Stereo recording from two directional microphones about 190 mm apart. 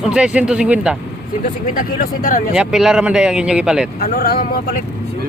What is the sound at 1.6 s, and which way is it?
Speech, 45° left (ahead or behind).